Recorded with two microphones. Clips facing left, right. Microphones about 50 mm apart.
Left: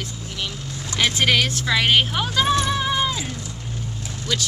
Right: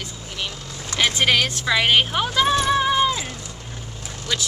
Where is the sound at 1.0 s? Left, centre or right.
Centre.